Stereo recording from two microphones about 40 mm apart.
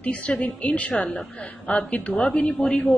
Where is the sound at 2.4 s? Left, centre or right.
Left.